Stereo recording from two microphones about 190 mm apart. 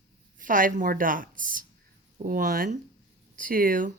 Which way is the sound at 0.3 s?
45° right (ahead or behind).